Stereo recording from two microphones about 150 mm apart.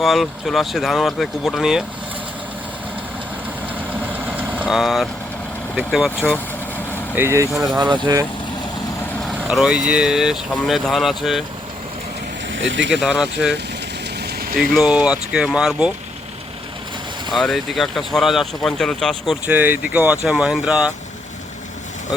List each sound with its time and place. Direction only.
0.0 s speech: centre (ahead or behind)
4.0 s vehicle: 10° right (ahead or behind)
7.2 s speech: 20° right (ahead or behind)
7.8 s speech: 30° right (ahead or behind)
9.2 s speech: 5° right (ahead or behind)
12.9 s speech: 5° right (ahead or behind)
14.2 s engine: 90° right
14.6 s speech: centre (ahead or behind)
17.3 s speech: centre (ahead or behind)
19.5 s speech: 10° right (ahead or behind)